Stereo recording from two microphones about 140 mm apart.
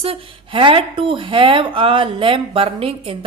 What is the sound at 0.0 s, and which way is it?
Speech, 40° right (ahead or behind).